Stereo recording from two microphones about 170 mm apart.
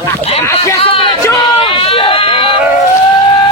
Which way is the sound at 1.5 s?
30° left (ahead or behind).